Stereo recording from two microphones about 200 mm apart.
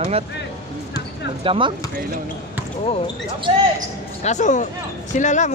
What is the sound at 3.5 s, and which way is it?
Speech, 30° right (ahead or behind).